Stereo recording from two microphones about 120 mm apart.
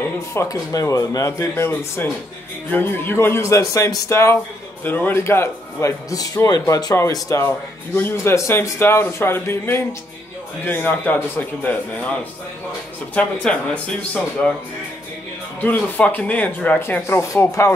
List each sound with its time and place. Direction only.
0.0 s a man's voice: 20° left (ahead or behind)
15.6 s a man's voice: 15° left (ahead or behind)